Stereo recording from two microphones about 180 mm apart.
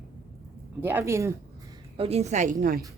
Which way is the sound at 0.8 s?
10° right (ahead or behind).